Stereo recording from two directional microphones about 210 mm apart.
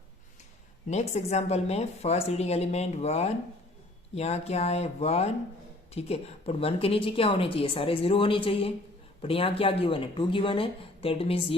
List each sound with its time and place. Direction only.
0.9 s a woman's voice: 30° left (ahead or behind)